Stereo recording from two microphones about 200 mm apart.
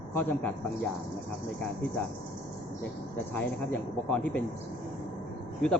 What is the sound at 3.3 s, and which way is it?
A man's voice, 5° left (ahead or behind).